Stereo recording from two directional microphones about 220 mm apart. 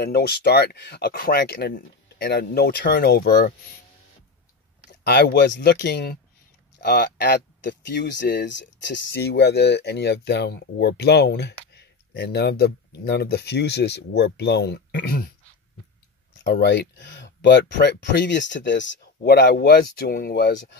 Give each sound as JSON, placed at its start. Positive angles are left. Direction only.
{"t": 0.0, "sound": "speech", "side_deg": 45}
{"t": 5.0, "sound": "speech", "side_deg": 50}
{"t": 16.4, "sound": "speech", "side_deg": 50}